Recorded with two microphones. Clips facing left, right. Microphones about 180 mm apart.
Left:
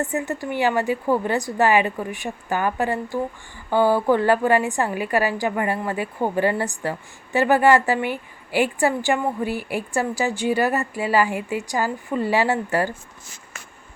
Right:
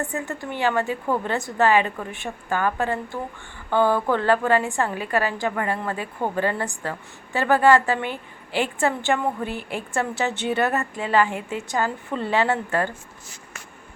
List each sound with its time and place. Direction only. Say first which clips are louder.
0.0 s a woman's voice: left 4 dB; 20° left (ahead or behind)